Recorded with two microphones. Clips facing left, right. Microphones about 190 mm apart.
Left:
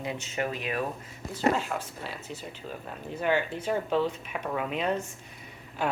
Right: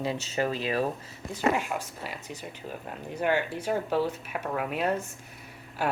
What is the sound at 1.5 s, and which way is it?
Speech, 10° right (ahead or behind).